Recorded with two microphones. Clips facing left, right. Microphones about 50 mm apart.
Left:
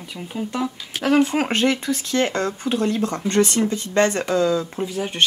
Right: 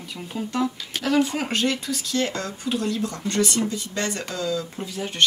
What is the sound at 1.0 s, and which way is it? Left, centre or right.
Speech, left.